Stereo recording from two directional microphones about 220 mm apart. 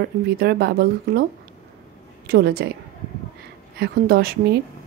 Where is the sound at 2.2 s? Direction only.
45° right (ahead or behind).